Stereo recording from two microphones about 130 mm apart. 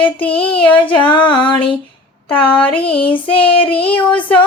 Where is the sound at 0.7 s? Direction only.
40° left (ahead or behind).